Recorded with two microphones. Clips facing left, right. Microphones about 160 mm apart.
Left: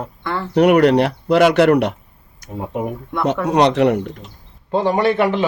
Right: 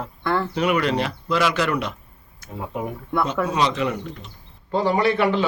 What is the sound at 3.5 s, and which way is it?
Speech, 65° left (ahead or behind).